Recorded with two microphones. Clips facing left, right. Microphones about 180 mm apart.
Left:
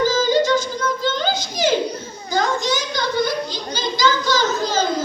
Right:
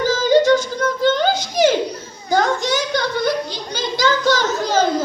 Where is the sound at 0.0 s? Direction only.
65° right (ahead or behind).